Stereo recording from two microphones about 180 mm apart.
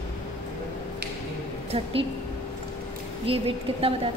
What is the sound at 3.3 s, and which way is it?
Speech, 30° right (ahead or behind).